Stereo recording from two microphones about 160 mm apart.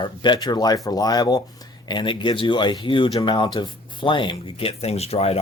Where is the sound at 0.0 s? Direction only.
30° left (ahead or behind).